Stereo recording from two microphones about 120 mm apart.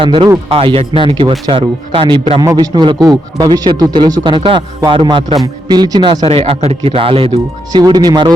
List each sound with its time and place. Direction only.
0.0 s speech: 45° right (ahead or behind)
2.4 s speech: 35° right (ahead or behind); by 7.3 s 50° right (ahead or behind)
7.7 s speech: 35° right (ahead or behind)